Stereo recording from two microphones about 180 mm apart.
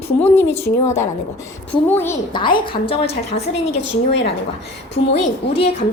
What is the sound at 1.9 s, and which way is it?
Speech, 10° left (ahead or behind).